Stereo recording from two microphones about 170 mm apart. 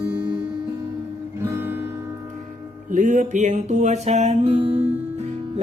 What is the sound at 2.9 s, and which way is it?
Music, 50° right (ahead or behind).